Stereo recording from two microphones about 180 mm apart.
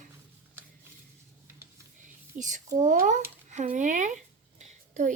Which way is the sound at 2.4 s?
45° right (ahead or behind).